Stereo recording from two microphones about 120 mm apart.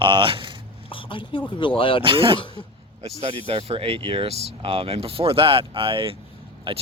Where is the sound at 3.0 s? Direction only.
60° right (ahead or behind).